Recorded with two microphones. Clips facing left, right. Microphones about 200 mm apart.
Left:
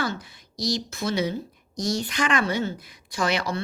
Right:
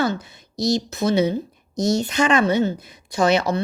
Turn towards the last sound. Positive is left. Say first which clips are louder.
# right 7 dB
turn(degrees=-25)  # may be behind; listen again after turning